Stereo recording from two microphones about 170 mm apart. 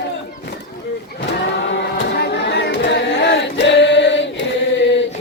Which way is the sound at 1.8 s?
80° left.